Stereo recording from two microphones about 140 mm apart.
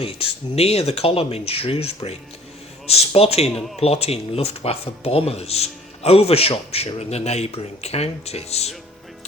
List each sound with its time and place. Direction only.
0.0 s speech: 45° left (ahead or behind)